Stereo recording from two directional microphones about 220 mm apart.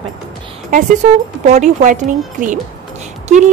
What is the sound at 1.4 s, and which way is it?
Speech, 35° right (ahead or behind).